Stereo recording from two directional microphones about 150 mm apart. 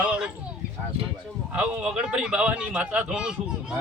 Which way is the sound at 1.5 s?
5° right (ahead or behind).